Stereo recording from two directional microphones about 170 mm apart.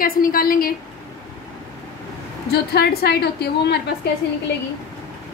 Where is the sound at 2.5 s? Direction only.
70° left (ahead or behind).